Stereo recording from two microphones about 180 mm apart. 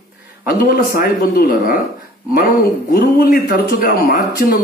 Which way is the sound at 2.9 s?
55° left (ahead or behind).